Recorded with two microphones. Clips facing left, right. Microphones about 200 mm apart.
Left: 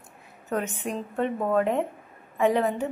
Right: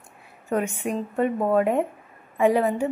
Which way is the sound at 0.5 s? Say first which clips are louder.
Right 4 dB; 10° right (ahead or behind).